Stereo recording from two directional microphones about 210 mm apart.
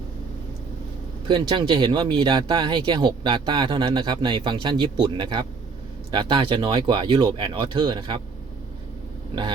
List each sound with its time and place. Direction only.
1.3 s speech: 20° right (ahead or behind)